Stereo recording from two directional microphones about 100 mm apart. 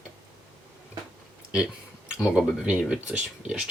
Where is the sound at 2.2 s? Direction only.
10° right (ahead or behind).